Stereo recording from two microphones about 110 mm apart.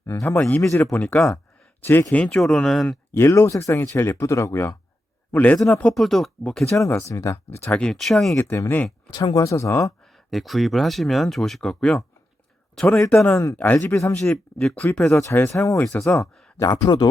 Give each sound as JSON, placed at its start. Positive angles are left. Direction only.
{"t": 0.2, "sound": "speech", "side_deg": 10}
{"t": 0.6, "sound": "speech", "side_deg": 25}
{"t": 0.9, "sound": "speech", "side_deg": 10}
{"t": 2.2, "sound": "speech", "side_deg": 5}
{"t": 3.2, "sound": "a man's voice", "side_deg": 25}
{"t": 6.7, "sound": "speech", "side_deg": 25}
{"t": 7.6, "sound": "speech", "side_deg": 10}
{"t": 8.4, "sound": "speech", "side_deg": 20}
{"t": 9.0, "sound": "speech", "side_deg": 35}
{"t": 10.3, "sound": "speech", "side_deg": 0}
{"t": 13.9, "sound": "speech", "side_deg": 25}
{"t": 14.2, "sound": "speech", "side_deg": 5}
{"t": 15.5, "sound": "speech", "side_deg": 25}